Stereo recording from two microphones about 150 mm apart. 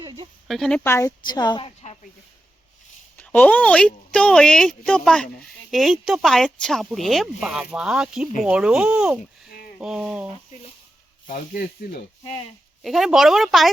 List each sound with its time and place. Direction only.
0.0 s a sound: 30° right (ahead or behind)
0.4 s a woman's voice: centre (ahead or behind)
0.9 s a woman's voice: 15° left (ahead or behind)
1.2 s a woman's voice: 30° left (ahead or behind)
1.6 s a sound: 45° left (ahead or behind)
3.2 s a woman's voice: 10° left (ahead or behind)
11.3 s speech: 90° left
12.8 s a woman's voice: centre (ahead or behind)